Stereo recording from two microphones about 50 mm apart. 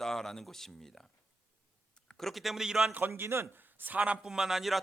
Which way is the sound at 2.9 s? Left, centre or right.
Right.